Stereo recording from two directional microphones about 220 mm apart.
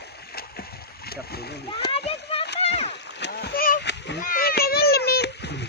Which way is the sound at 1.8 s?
25° left (ahead or behind).